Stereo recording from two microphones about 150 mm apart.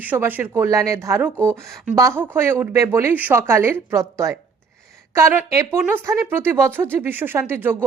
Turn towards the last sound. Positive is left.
turn(degrees=-15)  # may be behind; listen again after turning